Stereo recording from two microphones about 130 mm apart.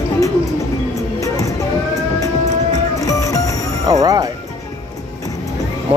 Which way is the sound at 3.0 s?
25° left (ahead or behind).